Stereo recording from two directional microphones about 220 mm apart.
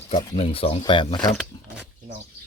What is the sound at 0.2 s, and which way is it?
Speech, 20° left (ahead or behind).